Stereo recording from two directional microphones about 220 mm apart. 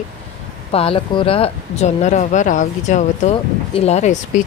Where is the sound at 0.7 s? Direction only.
25° left (ahead or behind).